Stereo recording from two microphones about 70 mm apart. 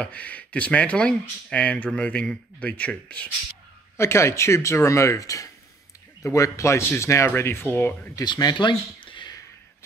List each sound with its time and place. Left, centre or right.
0.0 s speech: centre
3.9 s speech: left
8.2 s speech: left